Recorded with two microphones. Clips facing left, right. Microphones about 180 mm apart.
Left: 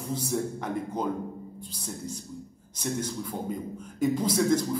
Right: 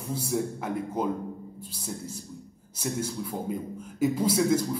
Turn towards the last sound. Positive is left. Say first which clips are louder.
# right 1 dB
turn(degrees=-10)  # may be behind; listen again after turning